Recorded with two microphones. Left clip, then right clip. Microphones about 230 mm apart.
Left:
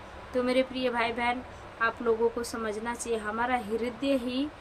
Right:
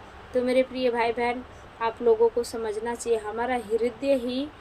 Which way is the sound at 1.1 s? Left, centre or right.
Left.